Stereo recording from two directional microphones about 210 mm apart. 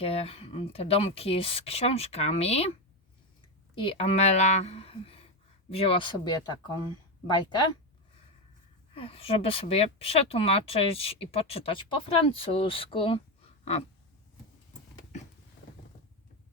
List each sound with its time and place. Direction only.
0.0 s speech: 25° left (ahead or behind)
3.8 s a woman's voice: 25° left (ahead or behind)
9.0 s speech: 25° left (ahead or behind)